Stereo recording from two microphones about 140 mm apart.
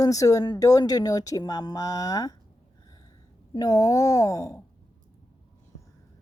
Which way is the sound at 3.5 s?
25° left (ahead or behind).